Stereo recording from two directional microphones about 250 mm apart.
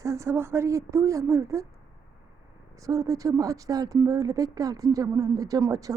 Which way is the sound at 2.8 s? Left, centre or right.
Centre.